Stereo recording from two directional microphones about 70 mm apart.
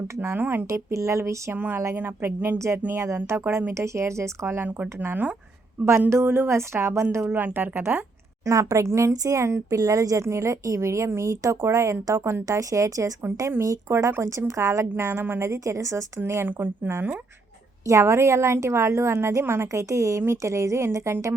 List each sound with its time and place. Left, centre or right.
0.2 s a woman's voice: right
0.7 s speech: right
1.5 s a woman's voice: right
2.6 s a woman's voice: right
5.0 s a woman's voice: right
8.4 s speech: right
17.8 s a woman's voice: right